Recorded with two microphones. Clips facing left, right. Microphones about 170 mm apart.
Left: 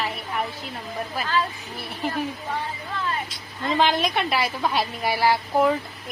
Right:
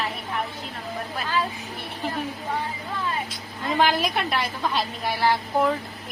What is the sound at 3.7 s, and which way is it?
A woman's voice, centre (ahead or behind).